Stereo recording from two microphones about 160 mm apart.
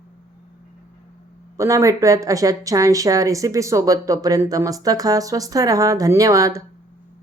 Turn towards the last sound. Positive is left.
turn(degrees=-20)  # may be behind; listen again after turning